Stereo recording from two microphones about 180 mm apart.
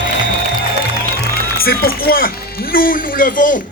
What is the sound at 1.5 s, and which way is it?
Speech, 55° left (ahead or behind).